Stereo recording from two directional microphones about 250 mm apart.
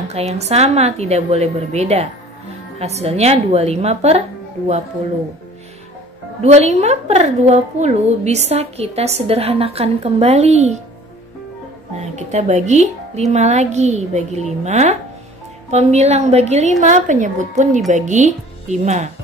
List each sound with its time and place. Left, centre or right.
0.1 s a woman's voice: right
6.4 s a woman's voice: right
12.0 s a woman's voice: right